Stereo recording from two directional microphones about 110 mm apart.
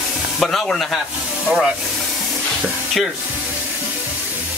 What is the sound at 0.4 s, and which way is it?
Speech, centre (ahead or behind).